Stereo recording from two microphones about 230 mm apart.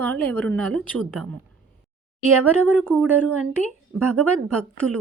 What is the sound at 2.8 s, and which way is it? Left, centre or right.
Speech, centre.